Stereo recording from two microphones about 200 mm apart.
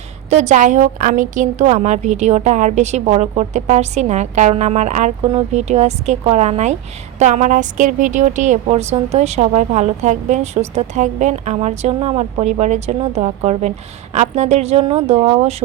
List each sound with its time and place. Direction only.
0.3 s a woman's voice: 35° right (ahead or behind)